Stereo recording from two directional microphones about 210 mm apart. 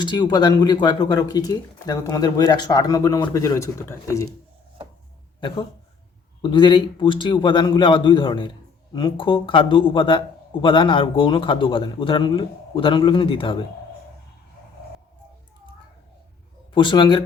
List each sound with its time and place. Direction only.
0.0 s a man's voice: 20° left (ahead or behind)
5.4 s a man's voice: 20° left (ahead or behind)
16.7 s a man's voice: 25° left (ahead or behind)